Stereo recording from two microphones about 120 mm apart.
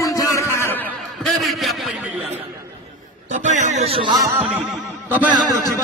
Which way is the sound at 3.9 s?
45° right (ahead or behind).